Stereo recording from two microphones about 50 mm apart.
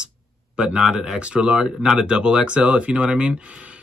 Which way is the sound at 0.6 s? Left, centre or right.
Centre.